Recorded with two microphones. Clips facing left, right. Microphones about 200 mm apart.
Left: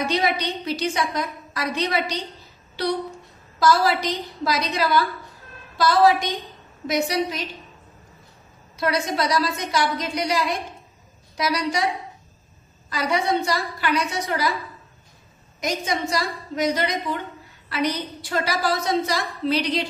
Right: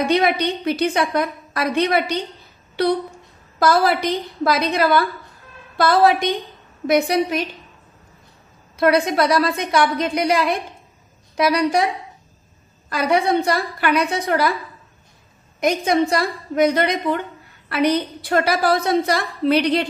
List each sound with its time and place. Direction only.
0.0 s a woman's voice: 60° right (ahead or behind)
8.7 s a woman's voice: 55° right (ahead or behind)
12.9 s a woman's voice: 60° right (ahead or behind)
15.6 s a woman's voice: 60° right (ahead or behind)